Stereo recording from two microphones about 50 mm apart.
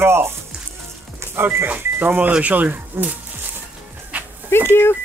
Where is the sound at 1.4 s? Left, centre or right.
Right.